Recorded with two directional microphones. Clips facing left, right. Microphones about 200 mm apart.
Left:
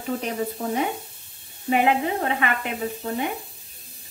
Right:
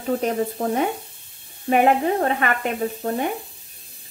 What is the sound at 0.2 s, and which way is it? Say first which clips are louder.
A woman's voice: right 5 dB; 45° right (ahead or behind).